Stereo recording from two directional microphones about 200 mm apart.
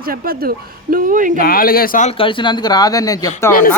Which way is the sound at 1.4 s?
45° left (ahead or behind).